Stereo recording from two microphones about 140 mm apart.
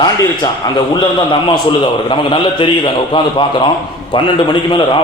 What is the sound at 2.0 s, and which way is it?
A man's voice, 35° left (ahead or behind).